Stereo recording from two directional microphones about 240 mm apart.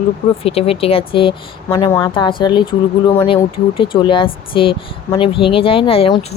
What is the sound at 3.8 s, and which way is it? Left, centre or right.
Speech, left.